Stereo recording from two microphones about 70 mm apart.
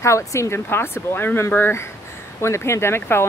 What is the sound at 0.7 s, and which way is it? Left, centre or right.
Speech, left.